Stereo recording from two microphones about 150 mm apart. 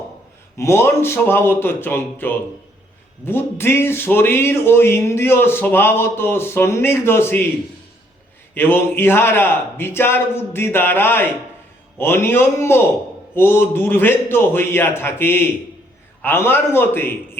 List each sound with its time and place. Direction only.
0.5 s speech: 20° left (ahead or behind)
8.5 s speech: 15° left (ahead or behind)